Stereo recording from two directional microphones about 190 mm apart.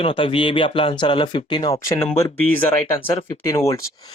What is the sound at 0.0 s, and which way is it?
Speech, 30° left (ahead or behind).